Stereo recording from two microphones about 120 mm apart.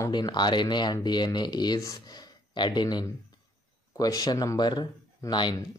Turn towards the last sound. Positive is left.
turn(degrees=35)  # may be behind; listen again after turning